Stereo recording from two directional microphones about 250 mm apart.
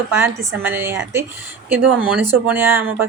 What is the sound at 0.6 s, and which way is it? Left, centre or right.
Speech, centre.